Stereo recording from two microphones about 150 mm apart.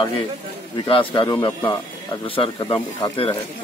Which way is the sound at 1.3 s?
20° left (ahead or behind).